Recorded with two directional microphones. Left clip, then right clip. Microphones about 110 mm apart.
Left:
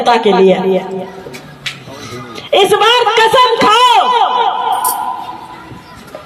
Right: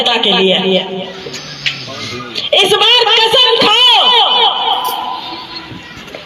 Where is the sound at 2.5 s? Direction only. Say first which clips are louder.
Even; 25° left (ahead or behind).